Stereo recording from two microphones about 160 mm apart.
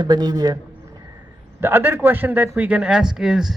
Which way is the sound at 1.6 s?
15° right (ahead or behind).